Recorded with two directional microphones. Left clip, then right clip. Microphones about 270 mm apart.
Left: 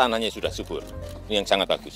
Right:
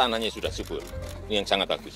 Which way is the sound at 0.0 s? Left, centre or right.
Left.